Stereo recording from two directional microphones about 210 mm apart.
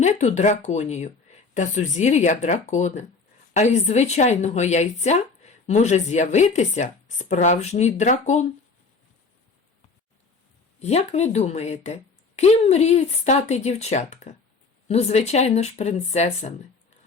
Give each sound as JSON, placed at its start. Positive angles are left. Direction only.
{"t": 0.0, "sound": "speech", "side_deg": 35}
{"t": 10.8, "sound": "speech", "side_deg": 30}